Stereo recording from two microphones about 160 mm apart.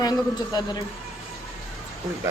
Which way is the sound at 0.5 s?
25° left (ahead or behind).